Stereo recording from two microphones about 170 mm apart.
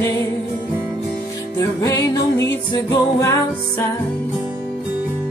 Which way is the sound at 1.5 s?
20° left (ahead or behind).